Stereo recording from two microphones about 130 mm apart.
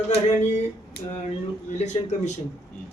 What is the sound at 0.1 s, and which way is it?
Speech, 60° left (ahead or behind).